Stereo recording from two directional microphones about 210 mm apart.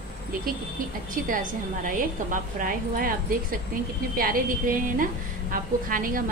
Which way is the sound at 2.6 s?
40° right (ahead or behind).